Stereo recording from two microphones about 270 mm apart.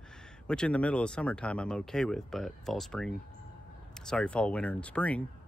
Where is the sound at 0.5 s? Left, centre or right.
Centre.